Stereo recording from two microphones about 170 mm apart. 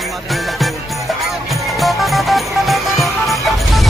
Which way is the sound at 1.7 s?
Centre (ahead or behind).